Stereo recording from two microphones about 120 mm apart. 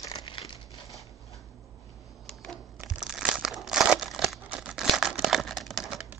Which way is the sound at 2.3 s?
5° left (ahead or behind).